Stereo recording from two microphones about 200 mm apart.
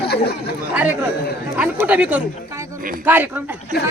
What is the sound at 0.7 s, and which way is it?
Speech, 10° right (ahead or behind).